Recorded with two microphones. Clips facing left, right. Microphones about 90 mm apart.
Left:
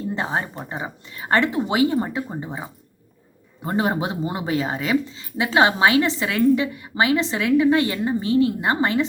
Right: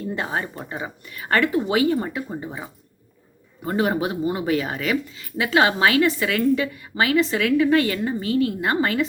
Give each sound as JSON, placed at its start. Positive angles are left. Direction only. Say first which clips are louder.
{"t": 0.1, "sound": "speech", "louder": "left 1 dB", "side_deg": 25}